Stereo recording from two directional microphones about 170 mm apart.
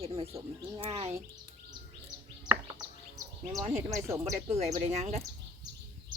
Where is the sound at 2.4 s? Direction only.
25° right (ahead or behind).